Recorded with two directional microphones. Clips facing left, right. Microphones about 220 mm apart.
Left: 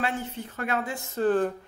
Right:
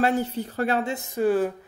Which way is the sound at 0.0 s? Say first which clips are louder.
Right 7 dB; 40° right (ahead or behind).